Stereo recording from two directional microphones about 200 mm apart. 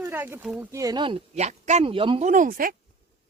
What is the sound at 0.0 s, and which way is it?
A man's voice, 10° right (ahead or behind).